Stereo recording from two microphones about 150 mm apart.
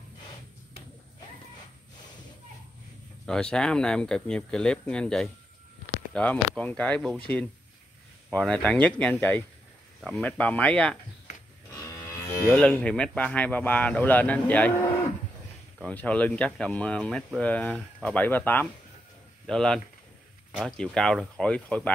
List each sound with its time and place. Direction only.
3.3 s speech: 5° left (ahead or behind)
8.3 s speech: 5° left (ahead or behind)
11.7 s cattle: 20° left (ahead or behind)
12.5 s speech: 5° left (ahead or behind)